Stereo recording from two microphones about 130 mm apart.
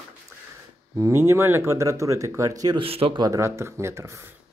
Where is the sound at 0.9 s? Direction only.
20° right (ahead or behind).